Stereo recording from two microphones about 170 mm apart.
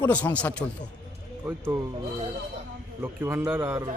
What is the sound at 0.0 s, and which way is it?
Speech, 10° left (ahead or behind).